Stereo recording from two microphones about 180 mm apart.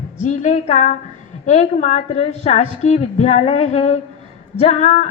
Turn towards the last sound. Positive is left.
turn(degrees=35)  # may be behind; listen again after turning